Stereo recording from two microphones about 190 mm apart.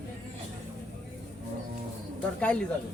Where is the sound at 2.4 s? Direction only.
5° left (ahead or behind).